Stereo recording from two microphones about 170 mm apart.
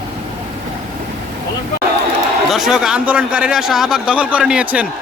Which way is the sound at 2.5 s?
Centre (ahead or behind).